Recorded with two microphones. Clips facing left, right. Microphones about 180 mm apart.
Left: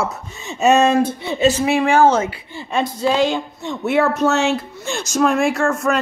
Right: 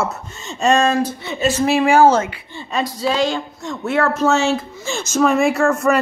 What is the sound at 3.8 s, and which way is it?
Speech, 15° left (ahead or behind).